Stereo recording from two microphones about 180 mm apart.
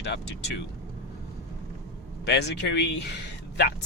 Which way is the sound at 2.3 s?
70° left (ahead or behind).